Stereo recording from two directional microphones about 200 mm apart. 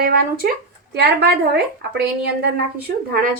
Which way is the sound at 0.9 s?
55° right (ahead or behind).